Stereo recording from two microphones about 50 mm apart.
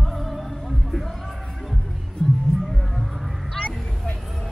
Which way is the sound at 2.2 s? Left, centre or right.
Centre.